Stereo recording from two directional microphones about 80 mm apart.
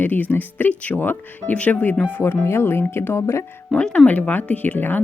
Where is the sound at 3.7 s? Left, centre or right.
Centre.